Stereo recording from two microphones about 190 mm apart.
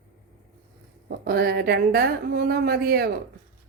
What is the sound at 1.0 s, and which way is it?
Speech, 55° right (ahead or behind).